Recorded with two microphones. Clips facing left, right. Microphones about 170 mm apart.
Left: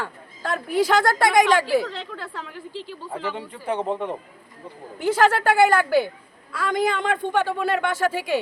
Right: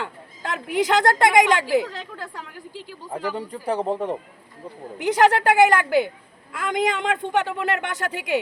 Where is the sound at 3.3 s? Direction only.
35° right (ahead or behind).